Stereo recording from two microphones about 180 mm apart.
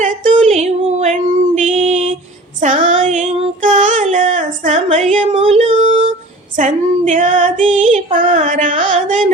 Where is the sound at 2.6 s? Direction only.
45° right (ahead or behind).